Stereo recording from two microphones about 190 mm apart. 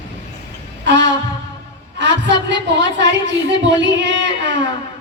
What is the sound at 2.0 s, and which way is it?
Speech, 65° right (ahead or behind).